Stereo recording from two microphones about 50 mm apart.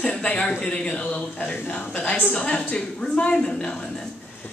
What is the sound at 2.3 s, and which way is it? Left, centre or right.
A woman's voice, left.